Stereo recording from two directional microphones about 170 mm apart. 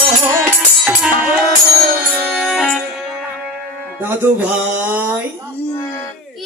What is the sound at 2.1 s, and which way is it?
Music, centre (ahead or behind).